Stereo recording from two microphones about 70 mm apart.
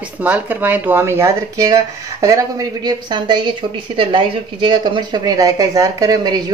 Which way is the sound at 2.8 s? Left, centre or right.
Right.